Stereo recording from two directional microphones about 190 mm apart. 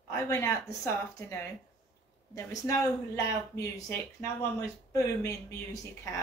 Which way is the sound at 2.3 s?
15° left (ahead or behind).